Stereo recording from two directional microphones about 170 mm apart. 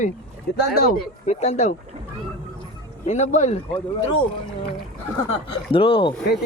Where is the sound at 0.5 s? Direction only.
65° left (ahead or behind).